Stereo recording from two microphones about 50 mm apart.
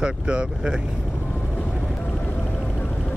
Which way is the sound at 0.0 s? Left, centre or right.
Centre.